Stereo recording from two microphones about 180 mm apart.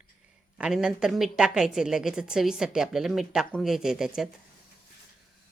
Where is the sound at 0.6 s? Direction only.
5° right (ahead or behind).